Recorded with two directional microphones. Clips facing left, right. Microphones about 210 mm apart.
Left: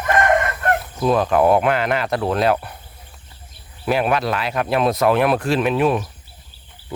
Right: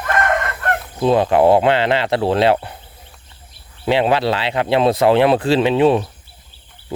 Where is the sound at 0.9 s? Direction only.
25° right (ahead or behind).